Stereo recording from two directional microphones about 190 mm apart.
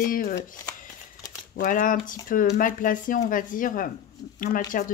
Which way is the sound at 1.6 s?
45° left (ahead or behind).